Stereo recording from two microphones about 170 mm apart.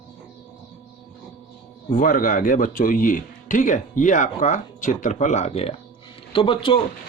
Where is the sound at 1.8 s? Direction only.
55° left (ahead or behind); by 6.8 s 30° left (ahead or behind).